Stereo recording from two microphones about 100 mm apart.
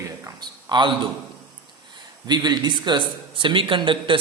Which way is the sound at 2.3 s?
45° right (ahead or behind).